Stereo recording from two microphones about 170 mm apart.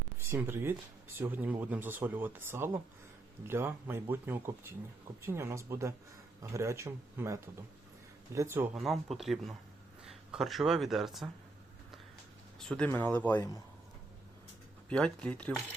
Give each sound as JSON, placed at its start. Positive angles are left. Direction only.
{"t": 0.2, "sound": "speech", "side_deg": -15}
{"t": 12.5, "sound": "speech", "side_deg": 5}
{"t": 14.8, "sound": "speech", "side_deg": 5}